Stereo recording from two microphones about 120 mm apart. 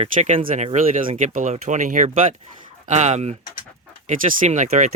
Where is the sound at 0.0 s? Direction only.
65° right (ahead or behind); by 2.3 s 90° right.